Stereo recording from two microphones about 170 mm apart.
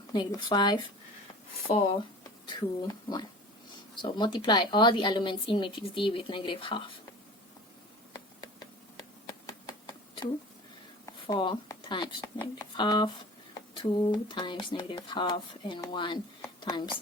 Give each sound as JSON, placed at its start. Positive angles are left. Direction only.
{"t": 0.1, "sound": "speech", "side_deg": 25}
{"t": 2.2, "sound": "speech", "side_deg": 25}
{"t": 8.1, "sound": "a sound", "side_deg": 25}
{"t": 11.0, "sound": "speech", "side_deg": 25}